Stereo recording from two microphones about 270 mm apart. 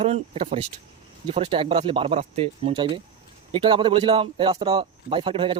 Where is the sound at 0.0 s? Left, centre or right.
Right.